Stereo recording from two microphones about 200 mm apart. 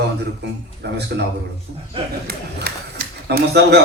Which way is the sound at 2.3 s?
50° right (ahead or behind).